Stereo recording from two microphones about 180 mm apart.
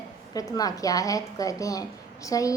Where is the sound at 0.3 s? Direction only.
20° left (ahead or behind).